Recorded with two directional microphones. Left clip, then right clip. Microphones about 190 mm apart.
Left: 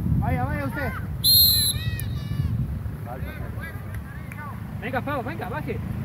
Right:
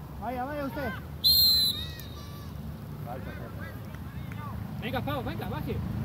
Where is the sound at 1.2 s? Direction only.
15° left (ahead or behind).